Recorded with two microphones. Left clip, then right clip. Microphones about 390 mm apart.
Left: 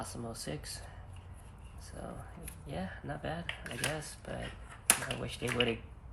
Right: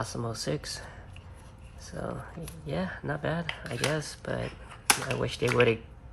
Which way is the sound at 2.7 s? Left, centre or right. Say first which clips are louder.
Right 8 dB; centre.